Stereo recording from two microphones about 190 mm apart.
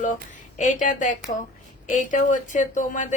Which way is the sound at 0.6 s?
40° left (ahead or behind).